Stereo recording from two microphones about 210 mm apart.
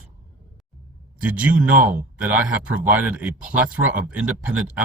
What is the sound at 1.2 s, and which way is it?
Speech, 5° right (ahead or behind).